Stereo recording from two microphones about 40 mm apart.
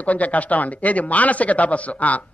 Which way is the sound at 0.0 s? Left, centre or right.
Left.